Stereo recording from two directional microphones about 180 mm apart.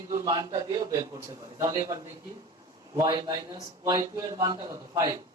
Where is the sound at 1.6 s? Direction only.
20° right (ahead or behind).